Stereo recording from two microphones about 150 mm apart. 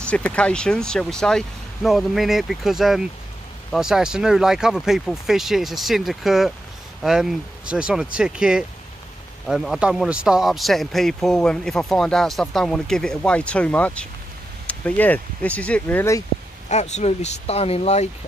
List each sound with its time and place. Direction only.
0.0 s speech: 10° left (ahead or behind)
16.6 s speech: 50° left (ahead or behind)